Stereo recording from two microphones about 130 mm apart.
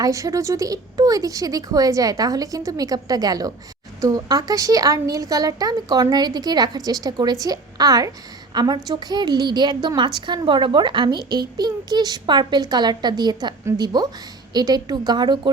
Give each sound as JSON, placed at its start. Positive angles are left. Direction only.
{"t": 0.0, "sound": "a woman's voice", "side_deg": -25}